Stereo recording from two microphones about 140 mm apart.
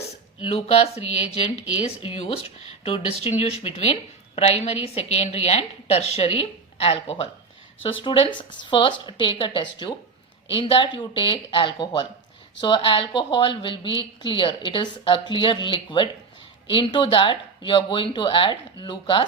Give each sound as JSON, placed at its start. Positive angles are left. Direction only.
{"t": 0.3, "sound": "a woman's voice", "side_deg": 45}